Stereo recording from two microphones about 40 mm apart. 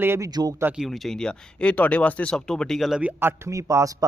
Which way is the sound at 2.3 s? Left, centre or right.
Centre.